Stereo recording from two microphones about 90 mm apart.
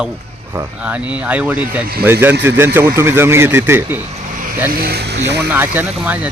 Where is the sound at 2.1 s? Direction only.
25° right (ahead or behind).